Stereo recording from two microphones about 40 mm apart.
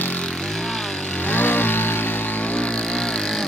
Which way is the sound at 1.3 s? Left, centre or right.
Left.